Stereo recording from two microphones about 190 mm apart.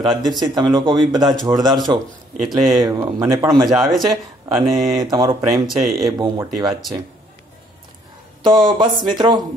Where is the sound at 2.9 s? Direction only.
15° right (ahead or behind).